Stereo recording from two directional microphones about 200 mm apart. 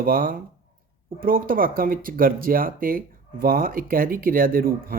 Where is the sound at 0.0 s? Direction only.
45° right (ahead or behind).